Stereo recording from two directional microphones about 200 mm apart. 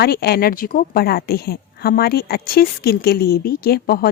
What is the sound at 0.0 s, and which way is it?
A woman's voice, 50° left (ahead or behind).